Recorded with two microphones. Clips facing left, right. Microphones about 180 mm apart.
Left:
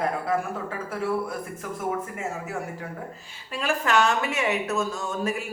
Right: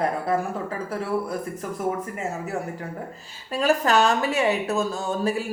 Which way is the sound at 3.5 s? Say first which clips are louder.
Right 4 dB; 40° right (ahead or behind).